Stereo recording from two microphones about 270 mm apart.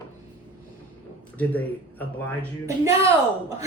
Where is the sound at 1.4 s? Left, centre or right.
Centre.